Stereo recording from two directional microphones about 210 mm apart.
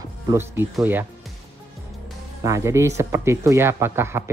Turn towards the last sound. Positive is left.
turn(degrees=-10)  # may be behind; listen again after turning